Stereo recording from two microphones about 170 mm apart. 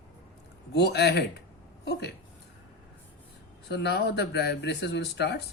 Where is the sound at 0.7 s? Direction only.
75° left (ahead or behind).